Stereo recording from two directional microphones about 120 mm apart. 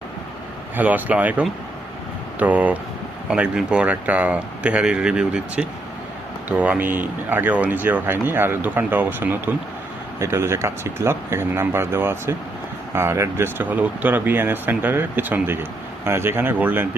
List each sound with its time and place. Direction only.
0.8 s speech: 15° right (ahead or behind)